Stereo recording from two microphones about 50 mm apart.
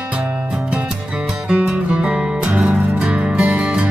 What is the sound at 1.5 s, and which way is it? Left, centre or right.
Music, centre.